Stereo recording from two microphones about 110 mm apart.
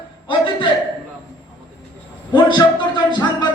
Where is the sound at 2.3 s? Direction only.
45° left (ahead or behind).